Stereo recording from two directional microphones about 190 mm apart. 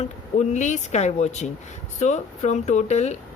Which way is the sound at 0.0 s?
40° left (ahead or behind).